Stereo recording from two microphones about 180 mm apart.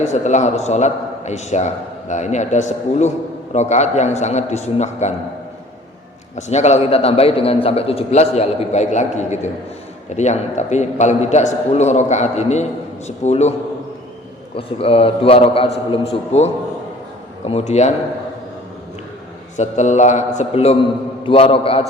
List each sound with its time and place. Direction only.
0.0 s a man's voice: 40° left (ahead or behind)
6.3 s a man's voice: 40° left (ahead or behind)
14.5 s a man's voice: 30° left (ahead or behind)
19.5 s a man's voice: 40° left (ahead or behind)